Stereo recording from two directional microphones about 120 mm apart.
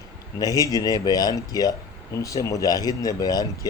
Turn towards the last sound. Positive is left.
turn(degrees=30)  # may be behind; listen again after turning